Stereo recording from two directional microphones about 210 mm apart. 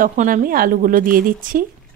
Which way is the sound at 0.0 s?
40° right (ahead or behind).